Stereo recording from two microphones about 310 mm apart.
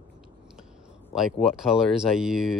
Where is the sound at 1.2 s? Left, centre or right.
Centre.